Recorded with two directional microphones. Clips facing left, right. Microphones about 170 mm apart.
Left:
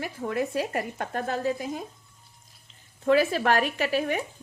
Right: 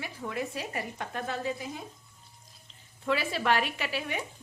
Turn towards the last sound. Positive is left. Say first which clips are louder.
# left 8 dB
turn(degrees=45)  # may be behind; listen again after turning